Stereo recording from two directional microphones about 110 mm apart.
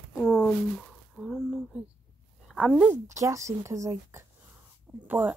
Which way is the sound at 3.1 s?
25° right (ahead or behind).